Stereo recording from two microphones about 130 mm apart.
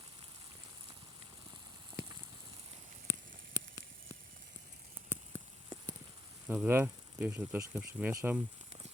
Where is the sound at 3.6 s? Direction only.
30° right (ahead or behind).